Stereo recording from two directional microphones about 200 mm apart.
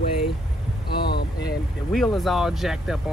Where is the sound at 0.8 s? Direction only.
50° left (ahead or behind).